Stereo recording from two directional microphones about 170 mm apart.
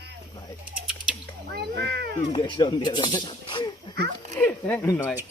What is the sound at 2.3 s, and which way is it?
Speech, 30° left (ahead or behind).